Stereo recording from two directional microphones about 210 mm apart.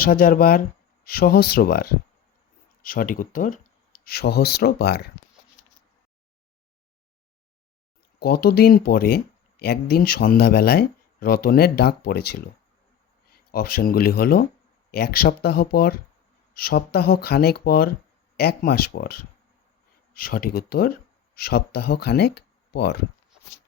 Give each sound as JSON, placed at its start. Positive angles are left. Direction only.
{"t": 0.0, "sound": "speech", "side_deg": 45}
{"t": 8.2, "sound": "speech", "side_deg": 45}
{"t": 13.5, "sound": "speech", "side_deg": 45}